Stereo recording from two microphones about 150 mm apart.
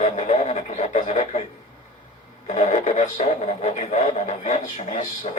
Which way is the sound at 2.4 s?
55° left (ahead or behind).